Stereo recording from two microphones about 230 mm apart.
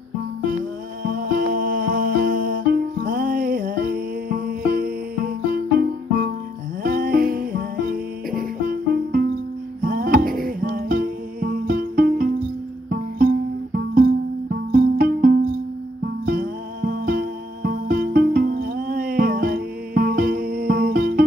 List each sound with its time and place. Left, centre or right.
1.0 s music: right